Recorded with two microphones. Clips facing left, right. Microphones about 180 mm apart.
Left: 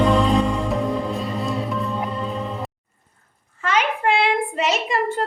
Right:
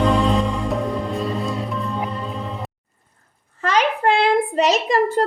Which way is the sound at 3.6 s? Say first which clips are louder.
Right 3 dB; 35° right (ahead or behind).